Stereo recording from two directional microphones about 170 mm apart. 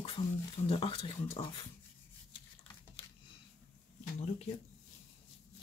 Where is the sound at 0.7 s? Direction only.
30° left (ahead or behind).